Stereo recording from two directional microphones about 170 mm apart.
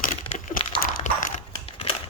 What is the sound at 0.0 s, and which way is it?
Crumpling, 50° left (ahead or behind).